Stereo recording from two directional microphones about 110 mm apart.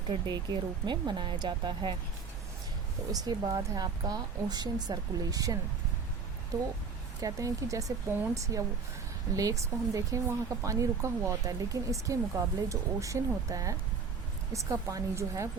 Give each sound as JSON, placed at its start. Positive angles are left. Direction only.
{"t": 0.1, "sound": "speech", "side_deg": -40}
{"t": 3.1, "sound": "speech", "side_deg": -35}
{"t": 7.2, "sound": "speech", "side_deg": -30}